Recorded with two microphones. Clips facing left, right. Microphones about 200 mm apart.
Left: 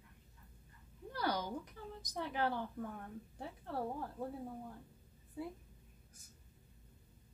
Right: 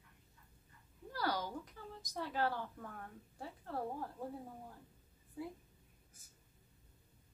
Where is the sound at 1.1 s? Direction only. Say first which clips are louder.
Left 1 dB; 20° left (ahead or behind).